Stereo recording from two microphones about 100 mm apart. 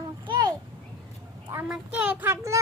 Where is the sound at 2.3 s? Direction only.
30° right (ahead or behind).